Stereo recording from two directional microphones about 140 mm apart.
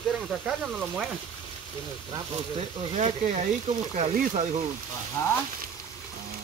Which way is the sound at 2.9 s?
55° right (ahead or behind).